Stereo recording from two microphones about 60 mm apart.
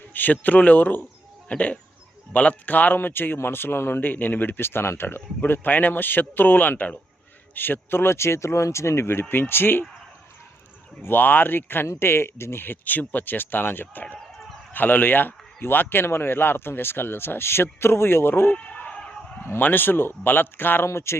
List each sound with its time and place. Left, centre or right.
0.1 s speech: left
11.0 s speech: left
18.5 s sheep: centre
18.9 s a sound: centre
19.4 s speech: left